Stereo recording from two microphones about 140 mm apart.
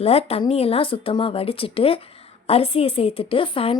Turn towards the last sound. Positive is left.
turn(degrees=40)  # may be behind; listen again after turning